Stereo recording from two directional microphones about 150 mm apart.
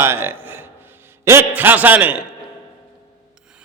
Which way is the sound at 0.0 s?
15° right (ahead or behind).